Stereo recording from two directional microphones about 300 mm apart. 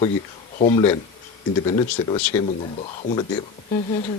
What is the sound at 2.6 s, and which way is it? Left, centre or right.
Speech, centre.